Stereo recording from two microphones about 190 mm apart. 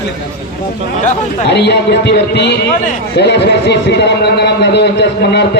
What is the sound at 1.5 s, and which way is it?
A man's voice, 65° left (ahead or behind).